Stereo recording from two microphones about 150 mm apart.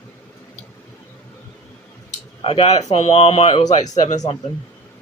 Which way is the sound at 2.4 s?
40° left (ahead or behind).